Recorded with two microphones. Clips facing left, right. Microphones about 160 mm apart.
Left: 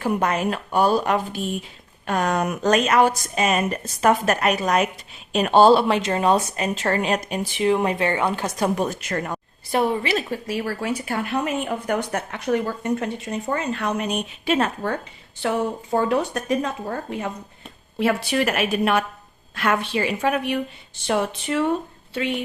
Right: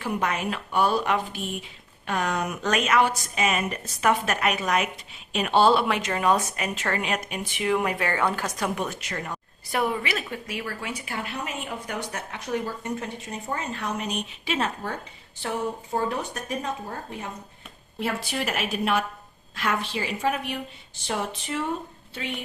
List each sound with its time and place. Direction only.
0.0 s a woman's voice: 45° left (ahead or behind)
9.7 s a woman's voice: 30° left (ahead or behind); by 14.9 s 55° left (ahead or behind)
15.4 s speech: 80° left
18.0 s a woman's voice: 70° left (ahead or behind)